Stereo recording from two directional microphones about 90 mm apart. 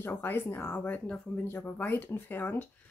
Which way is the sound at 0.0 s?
25° left (ahead or behind).